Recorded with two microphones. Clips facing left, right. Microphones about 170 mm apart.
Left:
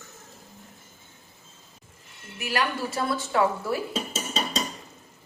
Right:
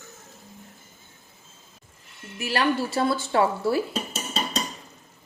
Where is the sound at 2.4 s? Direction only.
30° right (ahead or behind).